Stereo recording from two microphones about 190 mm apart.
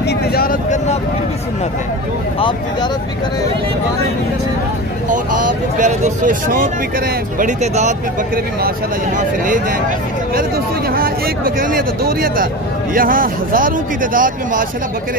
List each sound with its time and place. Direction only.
0.0 s speech: 55° left (ahead or behind)
5.8 s speech: 40° right (ahead or behind)
10.9 s speech: 50° right (ahead or behind)